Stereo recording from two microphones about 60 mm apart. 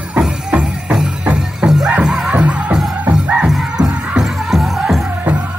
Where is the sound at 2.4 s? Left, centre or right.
Right.